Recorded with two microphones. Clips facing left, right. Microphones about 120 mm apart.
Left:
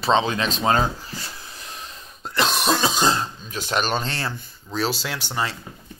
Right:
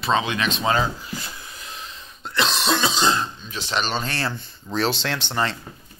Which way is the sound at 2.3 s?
45° left (ahead or behind).